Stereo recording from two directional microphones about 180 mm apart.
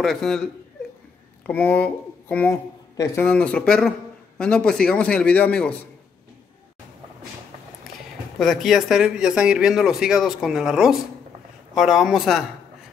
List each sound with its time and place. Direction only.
0.0 s a man's voice: centre (ahead or behind)
1.4 s a man's voice: 10° left (ahead or behind)
8.4 s a man's voice: centre (ahead or behind)